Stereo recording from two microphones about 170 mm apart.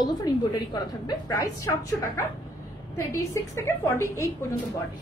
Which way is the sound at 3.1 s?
15° left (ahead or behind).